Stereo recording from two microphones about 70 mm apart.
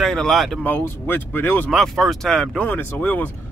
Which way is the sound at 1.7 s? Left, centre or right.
Centre.